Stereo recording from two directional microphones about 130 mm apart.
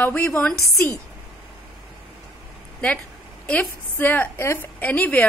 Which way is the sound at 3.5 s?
10° left (ahead or behind).